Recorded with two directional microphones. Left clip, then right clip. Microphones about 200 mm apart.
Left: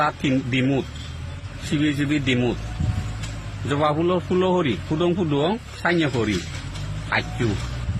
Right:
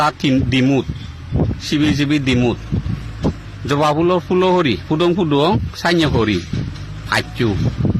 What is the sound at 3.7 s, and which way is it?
A man's voice, 35° right (ahead or behind).